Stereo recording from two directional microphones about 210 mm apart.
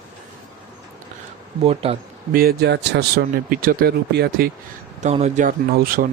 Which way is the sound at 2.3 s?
45° right (ahead or behind).